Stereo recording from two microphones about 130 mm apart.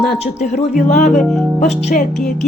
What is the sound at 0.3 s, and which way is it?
Speech, 60° left (ahead or behind).